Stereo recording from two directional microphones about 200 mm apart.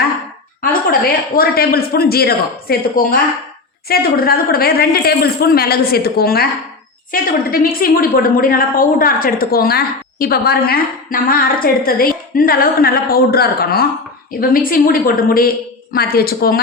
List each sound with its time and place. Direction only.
0.6 s a woman's voice: 45° left (ahead or behind)